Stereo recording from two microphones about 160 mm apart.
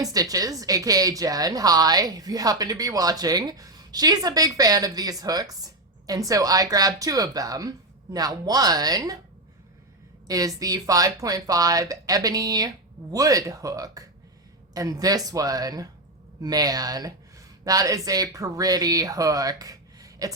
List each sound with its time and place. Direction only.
0.0 s a woman's voice: 20° right (ahead or behind)
10.2 s a woman's voice: 20° right (ahead or behind)